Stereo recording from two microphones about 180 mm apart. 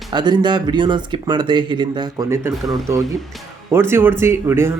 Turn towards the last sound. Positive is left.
turn(degrees=-15)  # may be behind; listen again after turning